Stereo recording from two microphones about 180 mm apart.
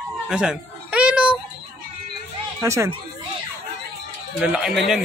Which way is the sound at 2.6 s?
15° right (ahead or behind).